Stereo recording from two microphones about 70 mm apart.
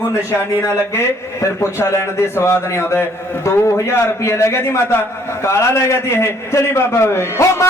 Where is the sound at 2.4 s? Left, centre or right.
Left.